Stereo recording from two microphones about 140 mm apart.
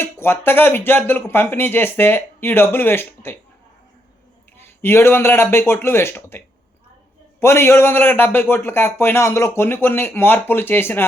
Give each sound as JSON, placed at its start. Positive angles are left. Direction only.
{"t": 0.0, "sound": "a man's voice", "side_deg": 15}
{"t": 4.5, "sound": "a man's voice", "side_deg": 15}